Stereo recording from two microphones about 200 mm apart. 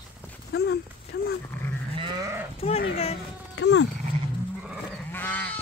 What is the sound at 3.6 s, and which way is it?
Dog, 65° left (ahead or behind).